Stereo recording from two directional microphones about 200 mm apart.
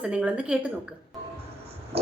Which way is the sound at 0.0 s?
5° right (ahead or behind).